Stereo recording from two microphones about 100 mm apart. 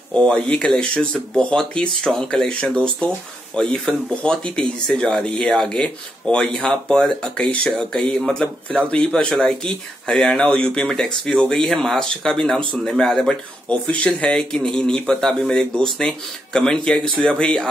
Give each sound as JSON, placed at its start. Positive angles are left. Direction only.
{"t": 0.1, "sound": "speech", "side_deg": 10}